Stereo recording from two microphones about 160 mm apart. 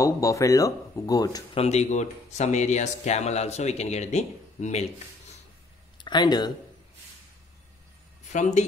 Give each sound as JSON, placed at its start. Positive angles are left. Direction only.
{"t": 0.0, "sound": "speech", "side_deg": 20}
{"t": 1.5, "sound": "speech", "side_deg": 40}
{"t": 5.9, "sound": "speech", "side_deg": 25}
{"t": 8.3, "sound": "speech", "side_deg": 45}